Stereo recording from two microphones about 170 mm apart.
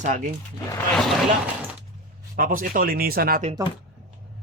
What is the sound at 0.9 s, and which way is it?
Speech, centre (ahead or behind).